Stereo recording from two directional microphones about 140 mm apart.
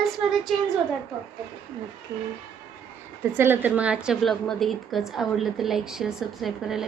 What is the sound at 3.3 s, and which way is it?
A woman's voice, 15° right (ahead or behind).